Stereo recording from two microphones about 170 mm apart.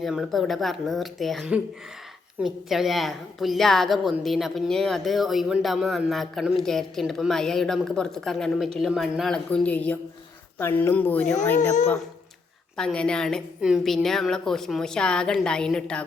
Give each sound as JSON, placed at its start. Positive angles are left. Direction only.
{"t": 0.0, "sound": "a woman's voice", "side_deg": 0}
{"t": 12.7, "sound": "a woman's voice", "side_deg": 5}